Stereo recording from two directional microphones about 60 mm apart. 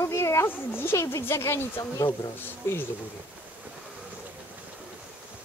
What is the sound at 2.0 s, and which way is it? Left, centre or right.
Speech, left.